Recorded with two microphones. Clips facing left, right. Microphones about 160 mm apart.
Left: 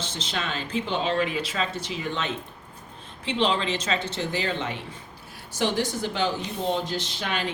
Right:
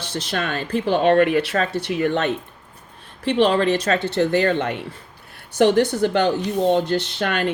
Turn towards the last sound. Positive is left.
turn(degrees=-60)  # may be behind; listen again after turning